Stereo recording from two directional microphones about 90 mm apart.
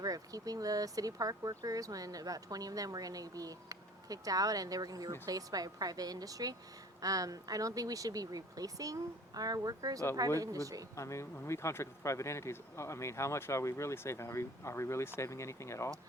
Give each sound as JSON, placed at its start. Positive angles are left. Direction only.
{"t": 0.0, "sound": "speech", "side_deg": -40}
{"t": 10.9, "sound": "speech", "side_deg": 35}